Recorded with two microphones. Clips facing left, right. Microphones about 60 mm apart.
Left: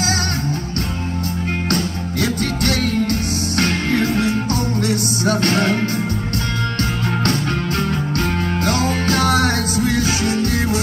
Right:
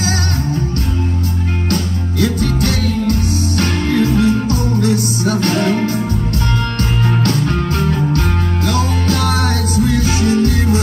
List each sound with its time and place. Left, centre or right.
2.4 s music: left
8.6 s music: left